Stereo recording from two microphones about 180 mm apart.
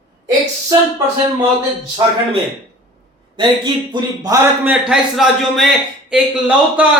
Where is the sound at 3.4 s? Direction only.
25° right (ahead or behind).